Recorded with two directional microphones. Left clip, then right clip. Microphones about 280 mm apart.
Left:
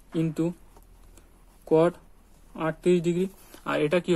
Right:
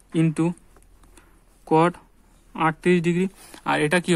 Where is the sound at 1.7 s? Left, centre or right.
Right.